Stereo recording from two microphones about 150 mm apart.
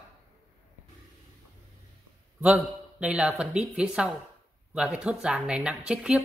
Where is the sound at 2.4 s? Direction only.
10° right (ahead or behind).